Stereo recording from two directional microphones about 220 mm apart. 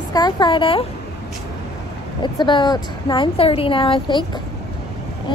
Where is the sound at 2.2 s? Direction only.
20° left (ahead or behind).